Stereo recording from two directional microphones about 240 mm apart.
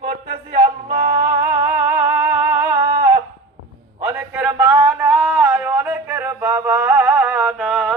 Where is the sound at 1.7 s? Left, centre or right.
Centre.